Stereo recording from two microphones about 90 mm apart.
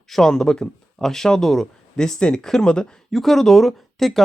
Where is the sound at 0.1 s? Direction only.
5° left (ahead or behind).